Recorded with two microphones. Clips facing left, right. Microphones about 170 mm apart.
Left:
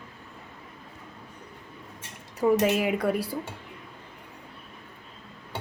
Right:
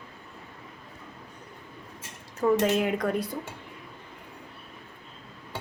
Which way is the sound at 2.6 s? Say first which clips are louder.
Left 1 dB; 5° left (ahead or behind).